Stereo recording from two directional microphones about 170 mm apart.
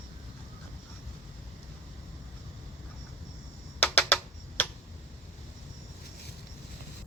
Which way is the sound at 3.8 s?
10° left (ahead or behind).